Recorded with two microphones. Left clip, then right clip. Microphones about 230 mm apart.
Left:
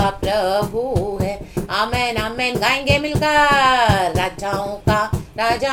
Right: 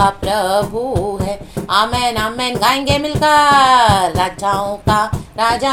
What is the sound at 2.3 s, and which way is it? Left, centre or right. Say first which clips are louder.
Music: right 1 dB; centre.